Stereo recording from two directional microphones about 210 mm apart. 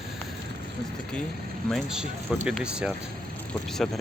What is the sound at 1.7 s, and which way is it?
Speech, 5° right (ahead or behind).